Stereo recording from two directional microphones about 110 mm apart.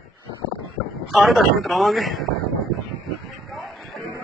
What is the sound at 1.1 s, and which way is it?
Speech, centre (ahead or behind).